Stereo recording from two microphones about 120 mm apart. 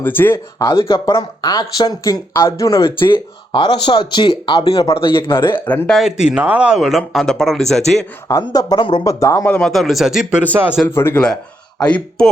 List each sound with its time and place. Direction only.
0.0 s speech: 15° left (ahead or behind)
0.6 s speech: 45° left (ahead or behind)
1.1 s speech: 30° left (ahead or behind)
2.8 s speech: 45° left (ahead or behind)
4.9 s speech: 45° left (ahead or behind)
5.5 s speech: 15° left (ahead or behind)
6.0 s speech: 5° right (ahead or behind)
8.3 s speech: 30° left (ahead or behind)
9.0 s speech: 25° left (ahead or behind)
9.5 s speech: 5° left (ahead or behind)
10.4 s speech: 15° right (ahead or behind)
10.8 s speech: 20° left (ahead or behind)
11.9 s speech: 10° left (ahead or behind)